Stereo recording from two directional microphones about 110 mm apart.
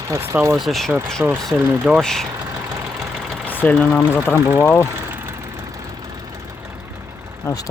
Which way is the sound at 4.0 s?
20° left (ahead or behind).